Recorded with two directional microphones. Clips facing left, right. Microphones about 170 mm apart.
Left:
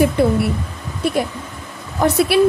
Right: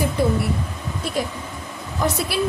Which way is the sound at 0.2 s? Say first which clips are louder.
Left 4 dB; 60° left (ahead or behind).